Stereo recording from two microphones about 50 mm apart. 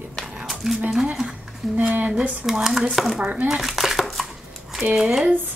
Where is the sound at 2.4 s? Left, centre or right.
Centre.